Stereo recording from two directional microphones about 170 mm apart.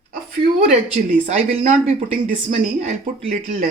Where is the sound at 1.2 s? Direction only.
50° right (ahead or behind).